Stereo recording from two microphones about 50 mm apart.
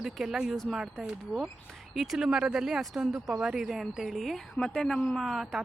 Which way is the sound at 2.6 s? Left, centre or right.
Centre.